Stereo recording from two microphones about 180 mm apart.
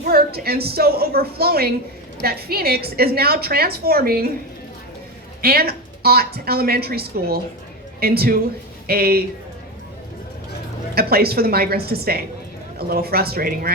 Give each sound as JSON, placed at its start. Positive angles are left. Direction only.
{"t": 0.0, "sound": "a woman's voice", "side_deg": -60}
{"t": 5.4, "sound": "a woman's voice", "side_deg": -60}
{"t": 10.9, "sound": "a woman's voice", "side_deg": -60}